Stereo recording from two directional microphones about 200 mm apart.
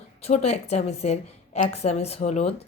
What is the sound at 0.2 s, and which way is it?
A woman's voice, 30° left (ahead or behind).